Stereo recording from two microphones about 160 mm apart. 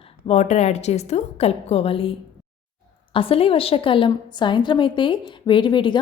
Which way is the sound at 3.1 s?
35° left (ahead or behind).